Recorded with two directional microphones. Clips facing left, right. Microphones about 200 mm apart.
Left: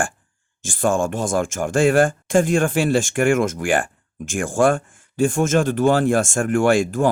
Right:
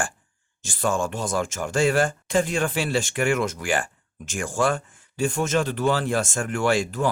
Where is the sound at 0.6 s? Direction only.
50° left (ahead or behind).